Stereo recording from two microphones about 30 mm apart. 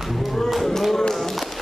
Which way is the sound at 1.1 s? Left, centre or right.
Centre.